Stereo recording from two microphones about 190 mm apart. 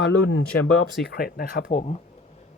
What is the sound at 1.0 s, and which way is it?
Speech, 55° left (ahead or behind).